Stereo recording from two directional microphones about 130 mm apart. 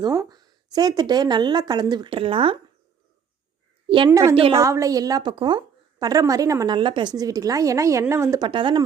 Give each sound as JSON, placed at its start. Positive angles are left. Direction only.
{"t": 0.0, "sound": "speech", "side_deg": -30}
{"t": 3.8, "sound": "a woman's voice", "side_deg": -40}
{"t": 4.1, "sound": "a woman's voice", "side_deg": -25}
{"t": 5.3, "sound": "a woman's voice", "side_deg": -40}
{"t": 6.7, "sound": "a woman's voice", "side_deg": -40}
{"t": 8.4, "sound": "speech", "side_deg": -35}